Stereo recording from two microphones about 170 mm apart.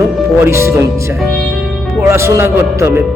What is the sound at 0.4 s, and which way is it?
Speech, 15° right (ahead or behind).